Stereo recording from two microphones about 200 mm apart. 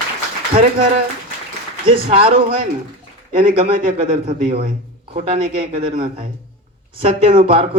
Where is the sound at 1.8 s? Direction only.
25° right (ahead or behind).